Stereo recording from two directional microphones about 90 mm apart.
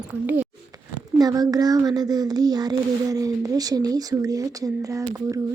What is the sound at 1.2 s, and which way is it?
Speech, 45° right (ahead or behind).